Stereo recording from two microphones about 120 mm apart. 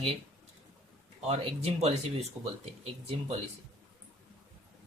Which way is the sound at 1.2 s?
60° right (ahead or behind).